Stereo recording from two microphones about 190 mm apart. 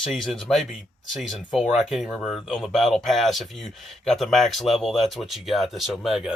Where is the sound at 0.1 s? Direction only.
Centre (ahead or behind).